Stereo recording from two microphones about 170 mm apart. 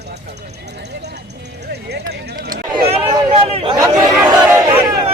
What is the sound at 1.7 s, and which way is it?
Speech, 75° right (ahead or behind).